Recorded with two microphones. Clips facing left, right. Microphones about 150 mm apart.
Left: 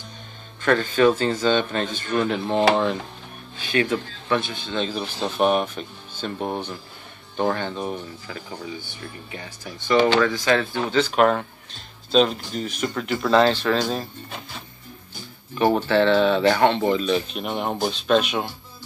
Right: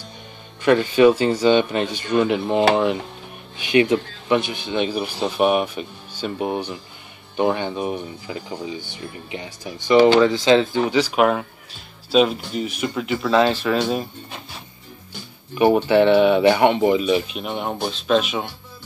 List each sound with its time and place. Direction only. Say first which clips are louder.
0.6 s speech: right 4 dB; 15° right (ahead or behind)
15.5 s speech: right 4 dB; 10° right (ahead or behind)